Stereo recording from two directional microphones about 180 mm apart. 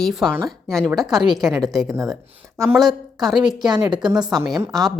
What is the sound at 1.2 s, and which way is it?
Speech, 20° right (ahead or behind).